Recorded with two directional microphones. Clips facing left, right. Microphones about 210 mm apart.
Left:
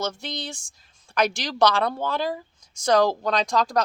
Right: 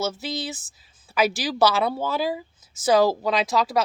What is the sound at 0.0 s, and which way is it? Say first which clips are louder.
A woman's voice: right 3 dB; 5° right (ahead or behind).